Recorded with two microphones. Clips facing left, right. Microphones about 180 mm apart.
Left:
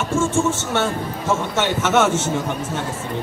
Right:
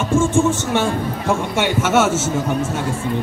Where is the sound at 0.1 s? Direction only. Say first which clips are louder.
Right 4 dB; 15° right (ahead or behind).